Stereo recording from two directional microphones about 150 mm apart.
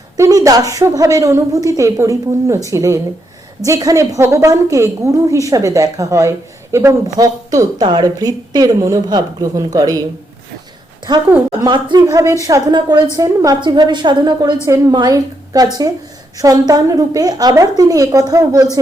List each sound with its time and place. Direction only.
0.2 s a woman's voice: 25° right (ahead or behind)
11.6 s a woman's voice: 30° right (ahead or behind)